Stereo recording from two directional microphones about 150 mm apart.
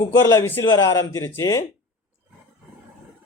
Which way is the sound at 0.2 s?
15° left (ahead or behind).